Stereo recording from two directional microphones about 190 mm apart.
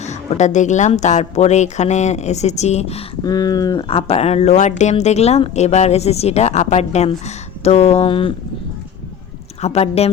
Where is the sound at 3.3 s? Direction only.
20° left (ahead or behind).